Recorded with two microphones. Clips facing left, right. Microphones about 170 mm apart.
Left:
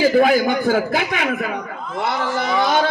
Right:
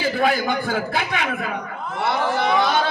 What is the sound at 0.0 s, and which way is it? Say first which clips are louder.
Speech: left 6 dB; 45° left (ahead or behind).